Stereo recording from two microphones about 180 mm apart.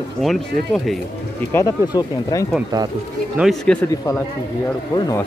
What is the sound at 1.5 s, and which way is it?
Speech, 20° left (ahead or behind).